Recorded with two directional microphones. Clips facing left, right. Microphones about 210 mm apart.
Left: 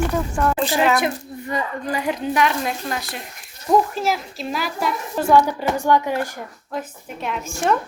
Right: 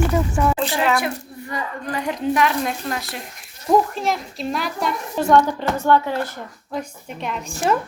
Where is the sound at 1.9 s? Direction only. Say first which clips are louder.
Right 2 dB; 5° left (ahead or behind).